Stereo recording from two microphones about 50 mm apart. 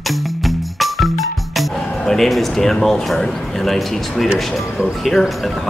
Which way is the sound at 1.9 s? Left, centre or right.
Centre.